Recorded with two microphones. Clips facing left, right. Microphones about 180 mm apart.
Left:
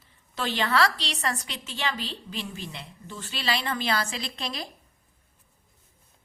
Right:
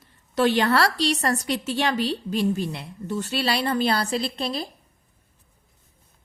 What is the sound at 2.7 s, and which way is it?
Speech, 60° right (ahead or behind).